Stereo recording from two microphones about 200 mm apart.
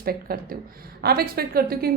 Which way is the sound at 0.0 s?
50° right (ahead or behind).